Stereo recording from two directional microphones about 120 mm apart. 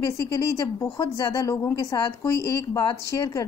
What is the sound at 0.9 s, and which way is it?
Speech, 30° left (ahead or behind).